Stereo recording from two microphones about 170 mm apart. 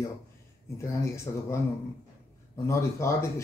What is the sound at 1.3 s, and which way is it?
Speech, 20° left (ahead or behind).